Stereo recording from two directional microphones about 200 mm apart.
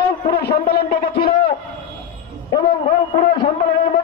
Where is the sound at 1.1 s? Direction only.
30° left (ahead or behind).